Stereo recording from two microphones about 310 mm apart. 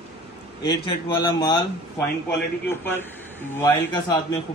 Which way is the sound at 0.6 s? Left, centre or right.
Centre.